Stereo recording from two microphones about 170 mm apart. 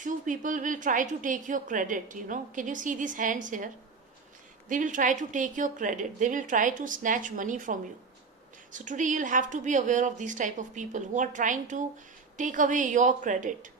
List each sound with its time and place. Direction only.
0.0 s a woman's voice: 50° right (ahead or behind)
4.7 s a woman's voice: 50° right (ahead or behind)